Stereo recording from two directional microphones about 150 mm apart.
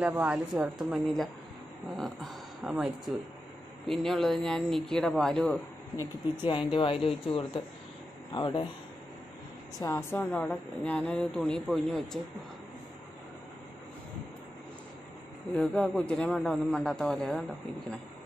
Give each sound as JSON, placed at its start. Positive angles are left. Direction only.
{"t": 0.0, "sound": "speech", "side_deg": -10}
{"t": 2.0, "sound": "a sound", "side_deg": 0}
{"t": 2.7, "sound": "a man's voice", "side_deg": -5}
{"t": 6.4, "sound": "speech", "side_deg": 35}
{"t": 9.8, "sound": "a man's voice", "side_deg": 15}
{"t": 15.5, "sound": "a man's voice", "side_deg": 5}